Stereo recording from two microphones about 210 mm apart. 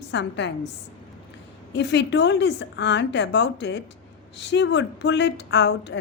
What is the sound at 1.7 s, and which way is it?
A woman's voice, 55° left (ahead or behind).